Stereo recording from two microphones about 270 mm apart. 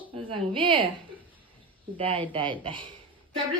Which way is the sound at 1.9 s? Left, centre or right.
Centre.